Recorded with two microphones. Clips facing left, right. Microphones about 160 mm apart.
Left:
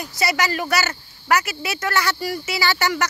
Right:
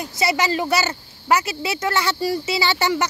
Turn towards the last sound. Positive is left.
turn(degrees=-25)  # may be behind; listen again after turning